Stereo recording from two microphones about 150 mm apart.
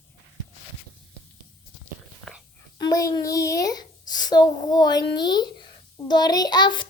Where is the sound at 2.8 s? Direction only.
25° left (ahead or behind).